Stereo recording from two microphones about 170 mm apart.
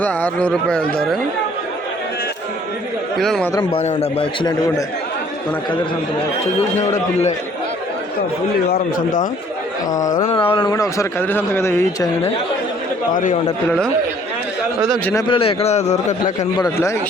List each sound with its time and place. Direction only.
0.0 s speech: 10° left (ahead or behind)
3.2 s speech: centre (ahead or behind)
3.8 s a man's voice: 35° left (ahead or behind)
6.7 s speech: 45° left (ahead or behind)
10.2 s a man's voice: 30° left (ahead or behind)
15.3 s a man's voice: 35° left (ahead or behind)
16.6 s a man's voice: 20° left (ahead or behind)